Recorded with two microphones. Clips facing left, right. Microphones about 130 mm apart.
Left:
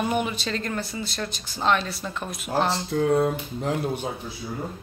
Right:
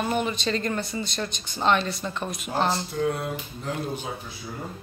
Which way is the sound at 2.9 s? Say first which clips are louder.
Left 4 dB; 90° left.